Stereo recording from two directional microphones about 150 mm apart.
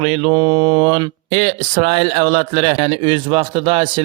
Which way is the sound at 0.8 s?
40° right (ahead or behind).